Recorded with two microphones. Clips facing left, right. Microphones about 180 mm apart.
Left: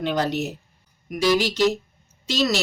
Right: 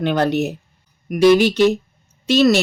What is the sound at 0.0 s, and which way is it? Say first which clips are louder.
Speech: right 6 dB; 60° right (ahead or behind).